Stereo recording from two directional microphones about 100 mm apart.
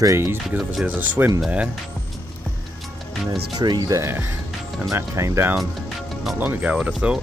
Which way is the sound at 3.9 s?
25° right (ahead or behind).